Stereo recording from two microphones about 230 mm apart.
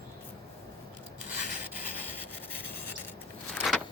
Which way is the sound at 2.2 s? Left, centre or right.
Centre.